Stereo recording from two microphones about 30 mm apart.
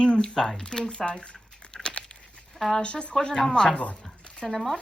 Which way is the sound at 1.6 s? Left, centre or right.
Left.